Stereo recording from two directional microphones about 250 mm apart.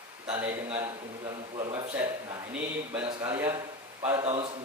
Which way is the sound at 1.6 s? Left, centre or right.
Right.